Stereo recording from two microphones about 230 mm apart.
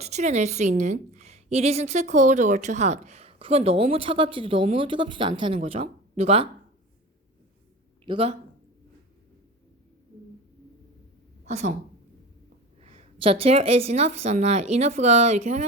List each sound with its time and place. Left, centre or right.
0.0 s a woman's voice: right
8.0 s a woman's voice: right
11.4 s a woman's voice: right
12.8 s a woman's voice: right